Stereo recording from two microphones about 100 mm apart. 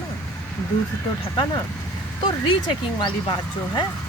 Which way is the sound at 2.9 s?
50° left (ahead or behind).